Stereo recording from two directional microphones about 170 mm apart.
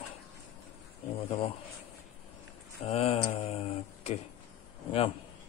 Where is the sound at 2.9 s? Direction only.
35° left (ahead or behind).